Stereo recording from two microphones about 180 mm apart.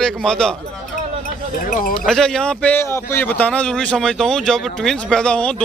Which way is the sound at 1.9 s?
5° left (ahead or behind).